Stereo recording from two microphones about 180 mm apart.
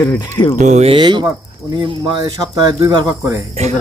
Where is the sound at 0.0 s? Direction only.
20° left (ahead or behind).